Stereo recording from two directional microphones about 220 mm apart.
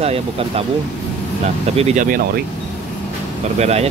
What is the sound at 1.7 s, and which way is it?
Speech, 30° right (ahead or behind).